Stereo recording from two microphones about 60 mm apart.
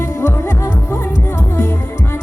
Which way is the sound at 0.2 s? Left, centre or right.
Left.